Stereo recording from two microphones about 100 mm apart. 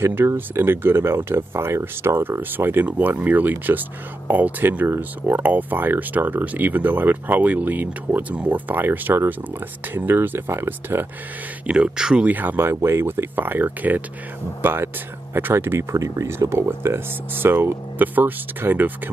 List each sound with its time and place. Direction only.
0.0 s speech: 25° right (ahead or behind)
11.6 s speech: 10° right (ahead or behind)